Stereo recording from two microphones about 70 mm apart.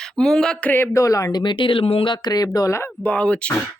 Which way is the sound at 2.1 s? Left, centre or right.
Left.